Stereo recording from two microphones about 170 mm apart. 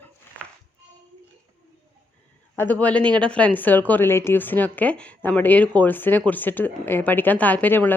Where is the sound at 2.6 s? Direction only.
10° left (ahead or behind).